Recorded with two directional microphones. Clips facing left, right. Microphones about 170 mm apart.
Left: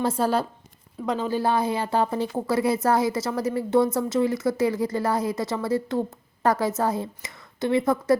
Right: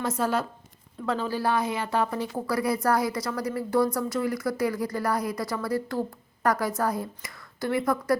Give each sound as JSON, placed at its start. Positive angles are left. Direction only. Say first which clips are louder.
{"t": 0.0, "sound": "speech", "louder": "left 3 dB", "side_deg": 30}
{"t": 1.0, "sound": "speech", "louder": "left 3 dB", "side_deg": 20}